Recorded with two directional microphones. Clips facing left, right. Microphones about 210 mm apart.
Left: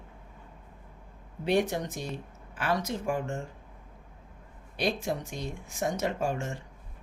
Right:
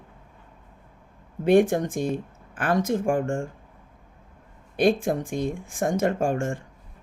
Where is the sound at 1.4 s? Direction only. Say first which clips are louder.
Right 8 dB; 50° right (ahead or behind).